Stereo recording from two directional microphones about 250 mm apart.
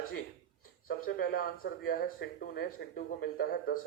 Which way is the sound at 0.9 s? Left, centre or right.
Left.